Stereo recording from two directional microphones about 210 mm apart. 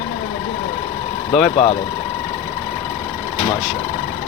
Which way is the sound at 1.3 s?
Centre (ahead or behind).